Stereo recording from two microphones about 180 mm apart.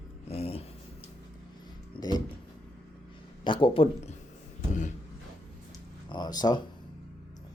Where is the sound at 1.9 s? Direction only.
20° left (ahead or behind).